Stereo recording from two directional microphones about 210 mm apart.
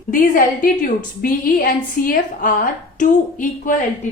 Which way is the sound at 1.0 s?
45° left (ahead or behind).